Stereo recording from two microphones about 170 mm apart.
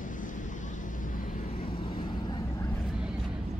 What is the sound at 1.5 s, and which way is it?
Vehicle, 30° left (ahead or behind).